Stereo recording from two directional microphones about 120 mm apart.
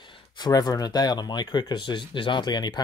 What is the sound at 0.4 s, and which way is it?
Speech, 35° left (ahead or behind).